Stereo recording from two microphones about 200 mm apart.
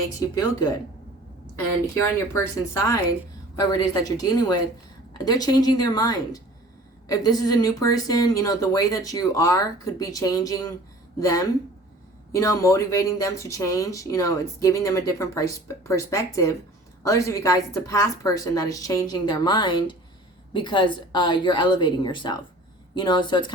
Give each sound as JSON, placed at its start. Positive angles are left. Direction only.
{"t": 0.2, "sound": "speech", "side_deg": 20}
{"t": 2.0, "sound": "a woman's voice", "side_deg": 15}